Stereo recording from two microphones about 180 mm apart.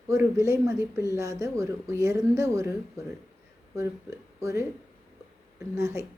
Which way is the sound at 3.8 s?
15° right (ahead or behind).